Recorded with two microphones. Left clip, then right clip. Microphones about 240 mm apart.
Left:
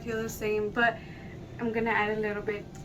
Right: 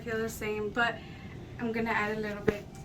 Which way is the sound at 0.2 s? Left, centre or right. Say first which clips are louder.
Left 7 dB; left.